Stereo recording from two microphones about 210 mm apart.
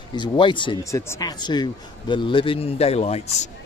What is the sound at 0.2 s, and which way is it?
Speech, 25° left (ahead or behind).